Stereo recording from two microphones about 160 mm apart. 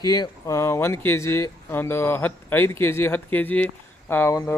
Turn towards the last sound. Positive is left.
turn(degrees=15)  # may be behind; listen again after turning